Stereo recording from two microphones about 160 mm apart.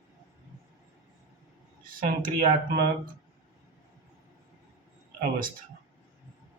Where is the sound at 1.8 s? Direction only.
60° right (ahead or behind).